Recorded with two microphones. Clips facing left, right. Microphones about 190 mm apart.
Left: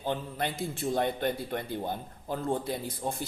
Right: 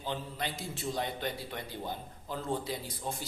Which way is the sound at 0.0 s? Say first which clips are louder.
Left 5 dB; 55° left (ahead or behind).